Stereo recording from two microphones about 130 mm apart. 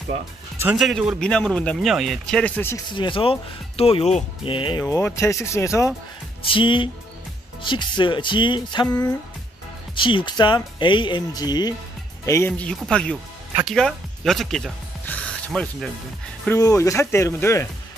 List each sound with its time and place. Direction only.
0.7 s a man's voice: centre (ahead or behind)
2.9 s speech: 40° left (ahead or behind)
4.6 s speech: 40° left (ahead or behind)
4.8 s speech: 25° left (ahead or behind)
6.4 s speech: 40° left (ahead or behind)
9.9 s speech: 40° left (ahead or behind)
12.3 s speech: 20° left (ahead or behind)
12.7 s a man's voice: 5° left (ahead or behind)
15.0 s music: 10° left (ahead or behind)
16.5 s speech: 25° left (ahead or behind)